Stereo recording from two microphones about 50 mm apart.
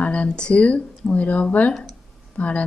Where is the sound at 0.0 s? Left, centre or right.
Left.